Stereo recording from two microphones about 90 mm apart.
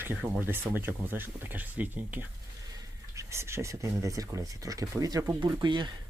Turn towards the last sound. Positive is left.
turn(degrees=-55)  # may be behind; listen again after turning